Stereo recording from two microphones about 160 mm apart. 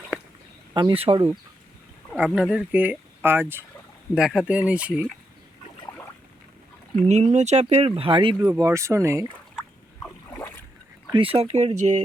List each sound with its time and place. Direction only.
0.7 s speech: 25° right (ahead or behind)
2.1 s speech: 5° right (ahead or behind)
7.0 s speech: 40° right (ahead or behind); by 9.2 s 20° right (ahead or behind)
10.3 s boat: 15° left (ahead or behind)
11.1 s speech: 35° right (ahead or behind)